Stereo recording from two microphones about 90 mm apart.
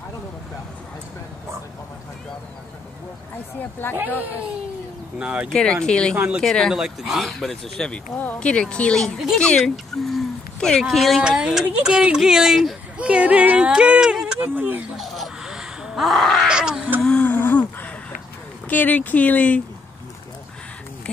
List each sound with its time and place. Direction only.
5.2 s speech: 10° right (ahead or behind)
5.5 s speech: 10° left (ahead or behind)
6.7 s speech: 5° right (ahead or behind)
13.0 s speech: 15° right (ahead or behind)
14.4 s speech: 20° right (ahead or behind)
15.0 s a sound: 5° right (ahead or behind)
16.4 s speech: 10° right (ahead or behind)
17.0 s a sound: 15° left (ahead or behind)
18.7 s speech: 20° left (ahead or behind)